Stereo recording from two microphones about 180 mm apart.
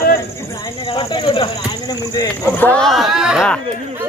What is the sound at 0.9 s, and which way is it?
Speech, 30° left (ahead or behind).